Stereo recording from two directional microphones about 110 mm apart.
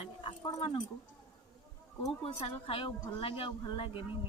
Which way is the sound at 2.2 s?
60° left (ahead or behind).